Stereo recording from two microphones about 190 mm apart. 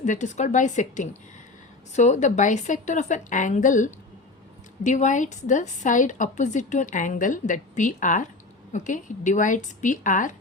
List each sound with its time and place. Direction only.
0.0 s a woman's voice: 40° left (ahead or behind)